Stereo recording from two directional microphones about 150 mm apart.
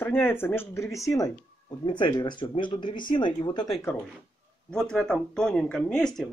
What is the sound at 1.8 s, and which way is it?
Speech, 30° left (ahead or behind).